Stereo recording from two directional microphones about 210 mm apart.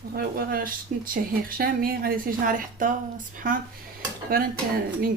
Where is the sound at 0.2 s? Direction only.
45° right (ahead or behind).